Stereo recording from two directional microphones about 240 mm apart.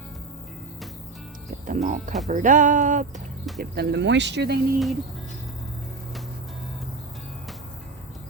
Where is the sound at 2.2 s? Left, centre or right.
Right.